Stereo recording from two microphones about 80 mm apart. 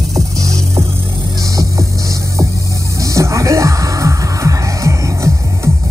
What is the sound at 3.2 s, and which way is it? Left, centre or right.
Music, right.